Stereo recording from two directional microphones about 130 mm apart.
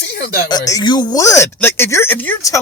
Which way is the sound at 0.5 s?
30° left (ahead or behind).